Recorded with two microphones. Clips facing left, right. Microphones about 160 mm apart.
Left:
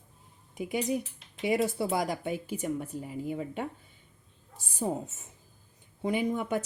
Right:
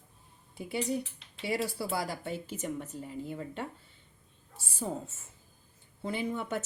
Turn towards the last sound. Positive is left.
turn(degrees=15)  # may be behind; listen again after turning